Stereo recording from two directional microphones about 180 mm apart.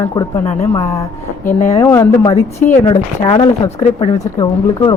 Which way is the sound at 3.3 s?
25° left (ahead or behind).